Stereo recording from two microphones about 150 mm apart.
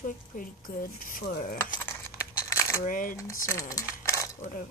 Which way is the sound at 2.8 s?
65° left (ahead or behind).